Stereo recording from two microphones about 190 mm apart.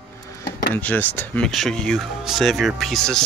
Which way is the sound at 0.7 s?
10° left (ahead or behind).